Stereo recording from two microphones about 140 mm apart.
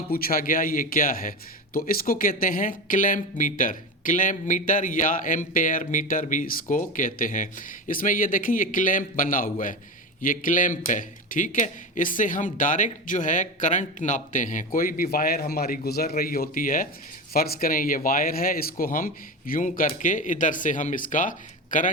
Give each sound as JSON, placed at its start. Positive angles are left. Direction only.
{"t": 0.1, "sound": "speech", "side_deg": 90}
{"t": 17.3, "sound": "speech", "side_deg": 90}